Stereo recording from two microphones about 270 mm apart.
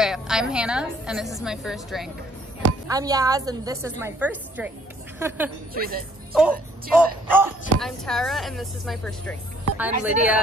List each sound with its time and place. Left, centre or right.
0.0 s speech: centre
2.9 s a woman's voice: centre
5.8 s speech: right
6.3 s speech: centre